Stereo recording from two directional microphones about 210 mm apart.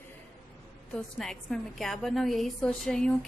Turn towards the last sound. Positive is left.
turn(degrees=5)  # may be behind; listen again after turning